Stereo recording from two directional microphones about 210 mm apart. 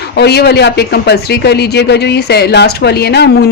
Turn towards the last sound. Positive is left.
turn(degrees=50)  # may be behind; listen again after turning